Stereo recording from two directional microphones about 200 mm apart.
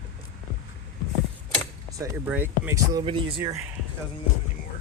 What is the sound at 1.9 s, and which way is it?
Speech, 15° right (ahead or behind).